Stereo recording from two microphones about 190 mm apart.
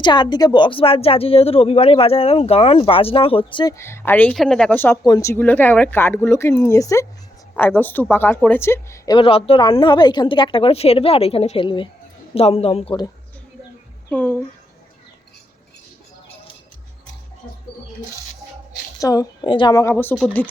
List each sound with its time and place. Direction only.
0.0 s speech: 25° left (ahead or behind)
14.1 s speech: 10° left (ahead or behind)
18.9 s speech: 20° left (ahead or behind)